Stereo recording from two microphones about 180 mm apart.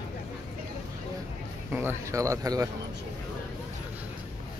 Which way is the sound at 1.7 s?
15° right (ahead or behind).